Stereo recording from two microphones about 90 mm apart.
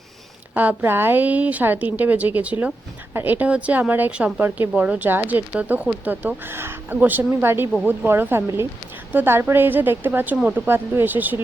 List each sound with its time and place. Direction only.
0.5 s a woman's voice: 20° right (ahead or behind)
10.7 s speech: 25° right (ahead or behind)